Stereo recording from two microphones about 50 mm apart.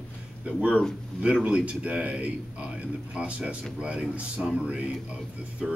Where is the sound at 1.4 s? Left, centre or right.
Right.